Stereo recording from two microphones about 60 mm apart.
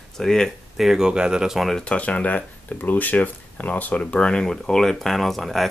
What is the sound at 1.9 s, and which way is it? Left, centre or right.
Speech, left.